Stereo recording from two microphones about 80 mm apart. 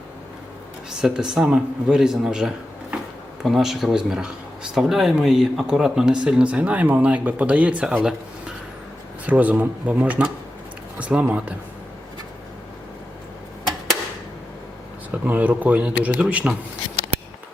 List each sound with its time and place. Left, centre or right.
1.0 s speech: centre
15.1 s speech: centre